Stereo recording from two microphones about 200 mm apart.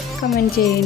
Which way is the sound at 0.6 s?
50° left (ahead or behind).